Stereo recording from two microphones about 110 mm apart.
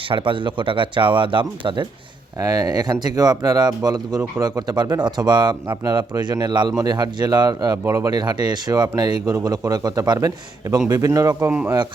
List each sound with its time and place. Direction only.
0.1 s speech: 50° right (ahead or behind)
2.4 s speech: 35° right (ahead or behind)
7.9 s speech: 25° right (ahead or behind)
8.1 s speech: 40° right (ahead or behind)
11.4 s speech: 15° right (ahead or behind)